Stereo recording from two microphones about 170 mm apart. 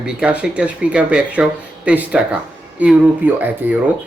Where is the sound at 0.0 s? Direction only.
5° right (ahead or behind).